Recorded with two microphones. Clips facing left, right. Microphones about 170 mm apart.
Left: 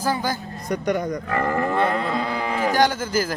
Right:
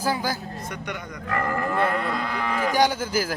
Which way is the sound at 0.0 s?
10° right (ahead or behind).